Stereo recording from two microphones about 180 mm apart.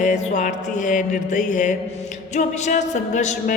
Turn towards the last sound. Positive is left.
turn(degrees=40)  # may be behind; listen again after turning